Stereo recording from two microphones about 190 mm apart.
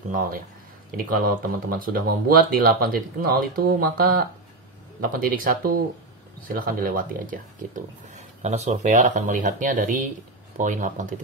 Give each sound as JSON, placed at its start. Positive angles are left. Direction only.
{"t": 0.9, "sound": "speech", "side_deg": -50}
{"t": 8.4, "sound": "speech", "side_deg": -35}